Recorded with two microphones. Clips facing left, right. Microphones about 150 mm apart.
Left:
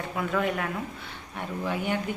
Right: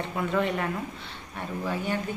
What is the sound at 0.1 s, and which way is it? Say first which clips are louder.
Speech: even; 5° left (ahead or behind).